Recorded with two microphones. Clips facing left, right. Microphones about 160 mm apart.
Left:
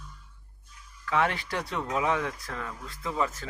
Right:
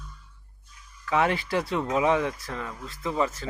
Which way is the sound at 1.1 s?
5° right (ahead or behind).